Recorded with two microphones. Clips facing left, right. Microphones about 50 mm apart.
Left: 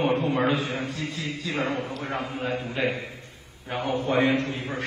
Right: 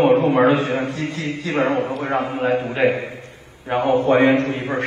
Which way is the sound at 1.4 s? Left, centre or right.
Right.